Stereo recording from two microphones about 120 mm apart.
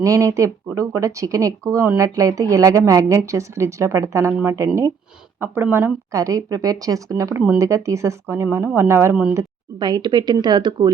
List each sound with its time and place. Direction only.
0.0 s speech: 25° right (ahead or behind)
9.3 s speech: 30° right (ahead or behind)